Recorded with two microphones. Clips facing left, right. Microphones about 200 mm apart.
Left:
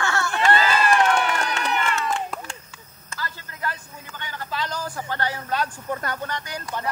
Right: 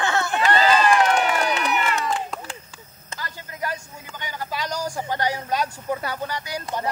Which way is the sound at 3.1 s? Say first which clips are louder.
Left 1 dB; 15° right (ahead or behind).